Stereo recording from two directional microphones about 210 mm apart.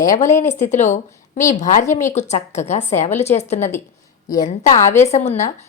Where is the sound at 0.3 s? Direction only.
35° left (ahead or behind).